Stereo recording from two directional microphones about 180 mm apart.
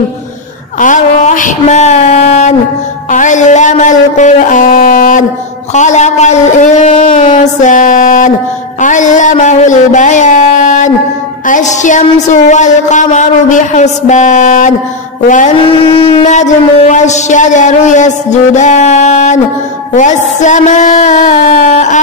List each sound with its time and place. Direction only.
0.7 s a sound: 45° left (ahead or behind)
3.1 s a man's voice: 45° left (ahead or behind)
15.6 s a woman's voice: 30° left (ahead or behind)